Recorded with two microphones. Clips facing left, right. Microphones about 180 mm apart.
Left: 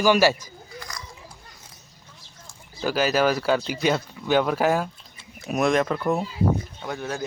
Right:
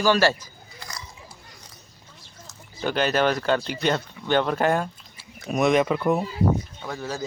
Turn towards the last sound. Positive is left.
turn(degrees=5)  # may be behind; listen again after turning